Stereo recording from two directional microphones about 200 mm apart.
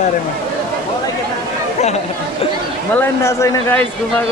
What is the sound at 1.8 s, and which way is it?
Speech, 35° left (ahead or behind).